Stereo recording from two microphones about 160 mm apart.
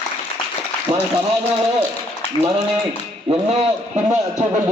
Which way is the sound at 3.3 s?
40° right (ahead or behind).